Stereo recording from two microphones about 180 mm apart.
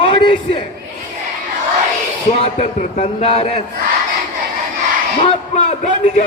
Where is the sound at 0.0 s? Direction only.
30° left (ahead or behind).